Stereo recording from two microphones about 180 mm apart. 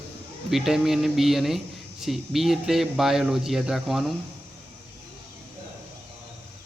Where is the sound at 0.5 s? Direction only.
Centre (ahead or behind).